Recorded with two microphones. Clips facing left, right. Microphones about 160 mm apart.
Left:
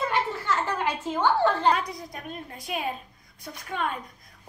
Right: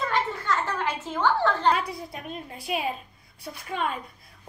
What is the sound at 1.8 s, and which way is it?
A woman's voice, 5° right (ahead or behind).